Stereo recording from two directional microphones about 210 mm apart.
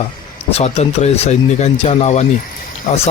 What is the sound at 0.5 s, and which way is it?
Speech, 30° left (ahead or behind).